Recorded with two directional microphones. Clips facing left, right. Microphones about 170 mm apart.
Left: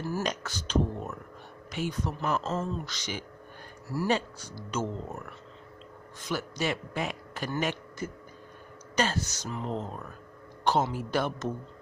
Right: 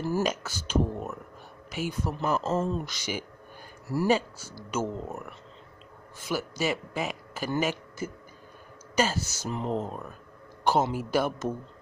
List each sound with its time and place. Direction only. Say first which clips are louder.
0.2 s a man's voice: right 4 dB; 5° right (ahead or behind)
9.5 s speech: right 5 dB; 20° right (ahead or behind)
9.8 s speech: right 3 dB; 10° right (ahead or behind)